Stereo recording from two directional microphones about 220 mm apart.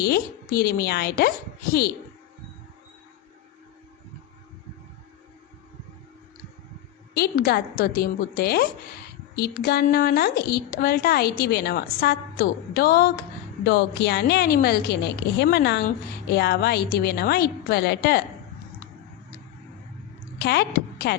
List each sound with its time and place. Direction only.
0.0 s a woman's voice: 45° left (ahead or behind)
7.1 s a woman's voice: 45° left (ahead or behind)
20.4 s a woman's voice: 45° left (ahead or behind)